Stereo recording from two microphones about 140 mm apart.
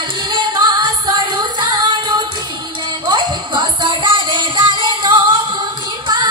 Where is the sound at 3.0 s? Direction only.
35° right (ahead or behind).